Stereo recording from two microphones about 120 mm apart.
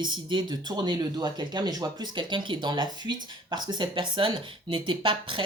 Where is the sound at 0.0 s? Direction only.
40° right (ahead or behind).